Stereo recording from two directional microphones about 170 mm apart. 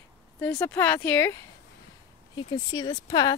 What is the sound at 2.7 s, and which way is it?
Speech, 20° left (ahead or behind).